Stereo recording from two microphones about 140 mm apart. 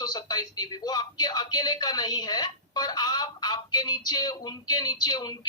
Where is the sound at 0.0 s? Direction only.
30° left (ahead or behind).